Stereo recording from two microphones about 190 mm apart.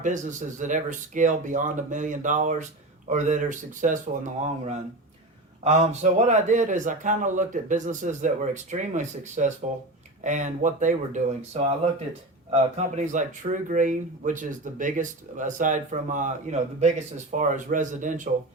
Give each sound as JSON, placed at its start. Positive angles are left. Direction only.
{"t": 0.0, "sound": "speech", "side_deg": -40}